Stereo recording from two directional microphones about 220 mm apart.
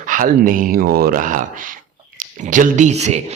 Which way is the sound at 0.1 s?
40° right (ahead or behind).